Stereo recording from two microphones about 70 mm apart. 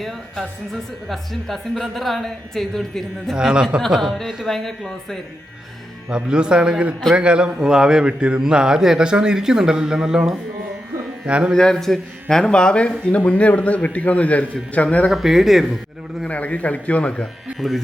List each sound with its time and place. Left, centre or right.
0.0 s speech: centre
3.3 s a man's voice: centre
3.8 s speech: centre
6.1 s a man's voice: centre
11.5 s a man's voice: centre
15.1 s speech: centre
16.2 s a man's voice: centre
17.6 s speech: centre